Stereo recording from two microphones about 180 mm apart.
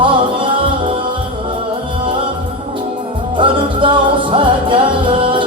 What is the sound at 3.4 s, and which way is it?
Music, 30° right (ahead or behind).